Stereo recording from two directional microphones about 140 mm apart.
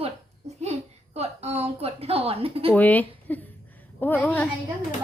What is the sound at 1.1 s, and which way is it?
A woman's voice, 50° right (ahead or behind).